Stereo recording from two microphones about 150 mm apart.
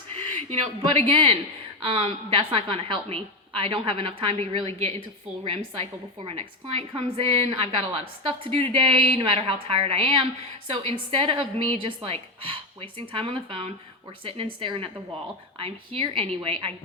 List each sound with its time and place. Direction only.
0.6 s a woman's voice: 40° right (ahead or behind)